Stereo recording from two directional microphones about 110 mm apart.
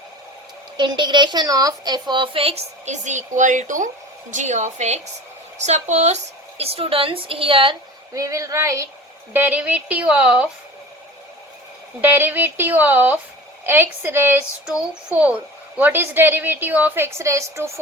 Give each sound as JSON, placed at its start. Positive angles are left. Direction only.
{"t": 0.8, "sound": "a woman's voice", "side_deg": -45}
{"t": 6.6, "sound": "a woman's voice", "side_deg": -65}
{"t": 8.1, "sound": "a woman's voice", "side_deg": -30}
{"t": 9.3, "sound": "a woman's voice", "side_deg": -15}
{"t": 12.1, "sound": "a woman's voice", "side_deg": -15}